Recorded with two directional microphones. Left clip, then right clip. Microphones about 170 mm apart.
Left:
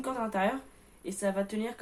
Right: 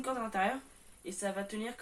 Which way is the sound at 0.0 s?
50° left (ahead or behind).